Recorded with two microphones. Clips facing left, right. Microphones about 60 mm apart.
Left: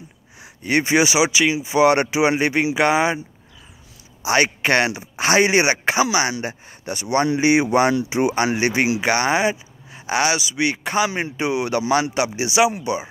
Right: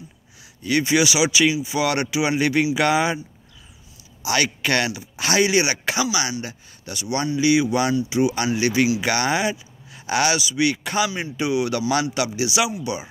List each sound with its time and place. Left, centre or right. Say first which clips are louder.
0.7 s speech: left 2 dB; left
4.2 s speech: left 4 dB; left
8.5 s speech: even; left
9.0 s a man's voice: left 3 dB; centre
11.1 s speech: left 3 dB; left
11.3 s speech: right 1 dB; left
11.9 s speech: left 5 dB; centre
12.4 s speech: left 7 dB; left